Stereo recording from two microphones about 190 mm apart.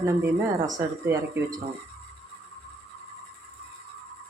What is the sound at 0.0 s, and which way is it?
Speech, 15° right (ahead or behind).